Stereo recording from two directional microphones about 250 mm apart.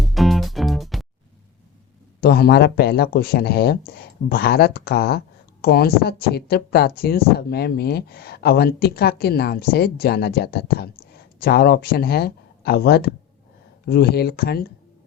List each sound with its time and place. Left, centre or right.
0.0 s music: centre
2.2 s speech: left